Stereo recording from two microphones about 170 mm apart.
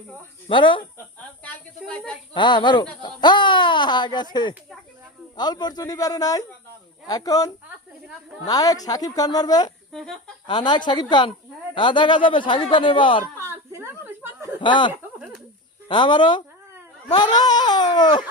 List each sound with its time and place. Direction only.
0.4 s speech: 30° left (ahead or behind)
1.5 s speech: 5° left (ahead or behind)
2.3 s speech: 25° left (ahead or behind)
9.9 s speech: 5° left (ahead or behind)
10.4 s speech: 25° left (ahead or behind)
13.4 s a woman's voice: 15° right (ahead or behind)
14.6 s speech: 30° left (ahead or behind)